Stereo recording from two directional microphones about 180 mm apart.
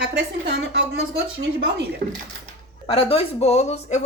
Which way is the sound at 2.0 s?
45° right (ahead or behind).